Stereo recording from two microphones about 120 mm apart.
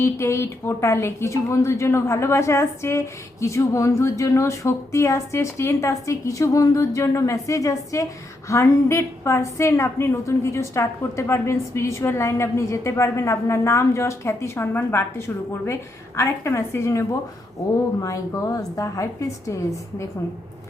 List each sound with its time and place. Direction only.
0.0 s a woman's voice: 20° left (ahead or behind)